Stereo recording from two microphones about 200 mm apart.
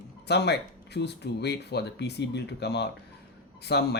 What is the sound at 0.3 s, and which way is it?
Speech, 55° left (ahead or behind).